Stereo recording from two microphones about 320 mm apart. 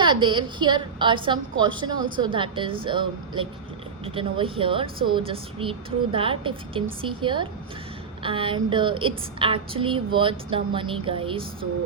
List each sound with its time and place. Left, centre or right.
0.0 s a woman's voice: centre